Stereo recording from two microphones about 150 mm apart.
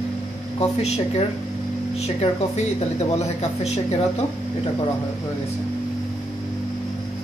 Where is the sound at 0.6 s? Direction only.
45° left (ahead or behind).